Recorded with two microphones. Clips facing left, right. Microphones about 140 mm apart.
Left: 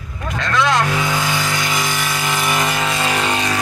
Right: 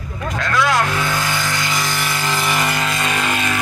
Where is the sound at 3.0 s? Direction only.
30° left (ahead or behind).